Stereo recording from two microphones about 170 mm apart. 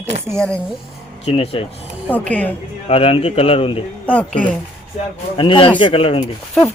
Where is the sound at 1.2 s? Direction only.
35° left (ahead or behind).